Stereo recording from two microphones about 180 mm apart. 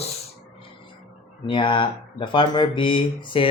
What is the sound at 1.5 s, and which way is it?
Speech, 30° left (ahead or behind).